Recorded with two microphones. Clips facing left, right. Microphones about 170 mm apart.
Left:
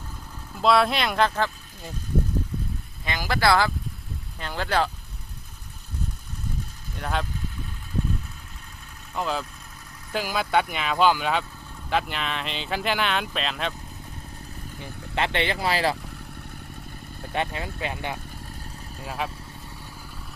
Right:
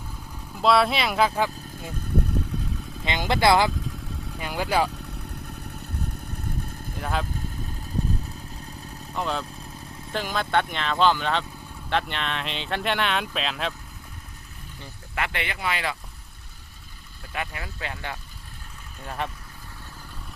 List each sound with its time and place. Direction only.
0.6 s speech: centre (ahead or behind)
3.0 s speech: 20° right (ahead or behind)
7.0 s speech: centre (ahead or behind)
9.1 s speech: centre (ahead or behind)
15.1 s speech: 30° left (ahead or behind)
17.3 s speech: 25° left (ahead or behind)
19.0 s speech: 5° left (ahead or behind)